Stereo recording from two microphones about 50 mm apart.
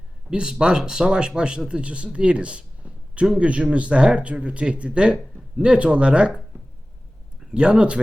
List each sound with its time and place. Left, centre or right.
0.3 s speech: centre